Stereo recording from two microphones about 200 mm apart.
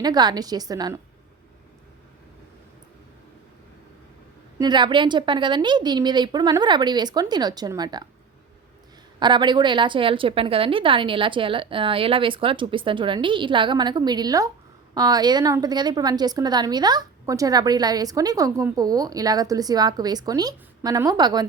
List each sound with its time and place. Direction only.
0.0 s a woman's voice: 20° right (ahead or behind)
4.5 s a woman's voice: 20° right (ahead or behind)
9.1 s a woman's voice: 20° right (ahead or behind)